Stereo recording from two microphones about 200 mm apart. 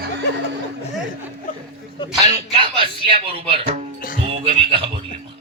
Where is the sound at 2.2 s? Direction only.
20° right (ahead or behind).